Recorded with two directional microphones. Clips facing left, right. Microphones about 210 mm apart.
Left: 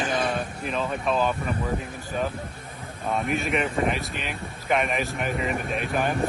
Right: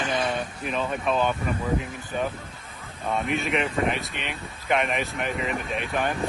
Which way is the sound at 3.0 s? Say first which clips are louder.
Even; centre (ahead or behind).